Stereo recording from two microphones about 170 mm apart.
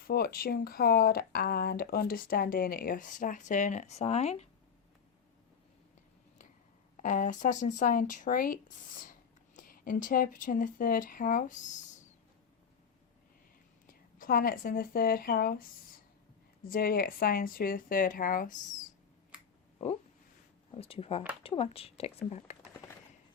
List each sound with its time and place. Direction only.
0.1 s speech: 65° left (ahead or behind); by 4.4 s 40° left (ahead or behind)
6.9 s speech: 50° left (ahead or behind)
13.8 s speech: 55° left (ahead or behind)
20.7 s speech: 35° left (ahead or behind)